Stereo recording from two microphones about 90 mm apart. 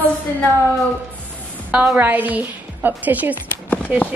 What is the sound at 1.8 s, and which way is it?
A woman's voice, 20° right (ahead or behind).